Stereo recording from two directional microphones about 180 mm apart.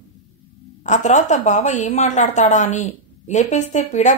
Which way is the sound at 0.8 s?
40° left (ahead or behind).